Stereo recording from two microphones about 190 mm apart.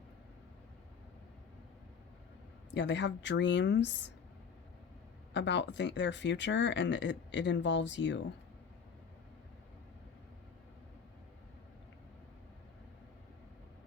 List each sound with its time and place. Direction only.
2.7 s speech: 70° left (ahead or behind)
5.3 s speech: 70° left (ahead or behind)